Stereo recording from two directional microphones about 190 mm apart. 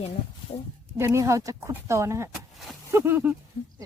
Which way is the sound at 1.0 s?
15° right (ahead or behind).